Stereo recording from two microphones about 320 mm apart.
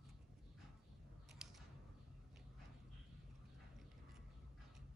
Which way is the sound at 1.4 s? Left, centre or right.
Centre.